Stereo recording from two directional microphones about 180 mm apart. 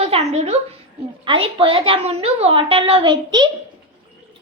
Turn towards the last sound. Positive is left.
turn(degrees=-25)  # may be behind; listen again after turning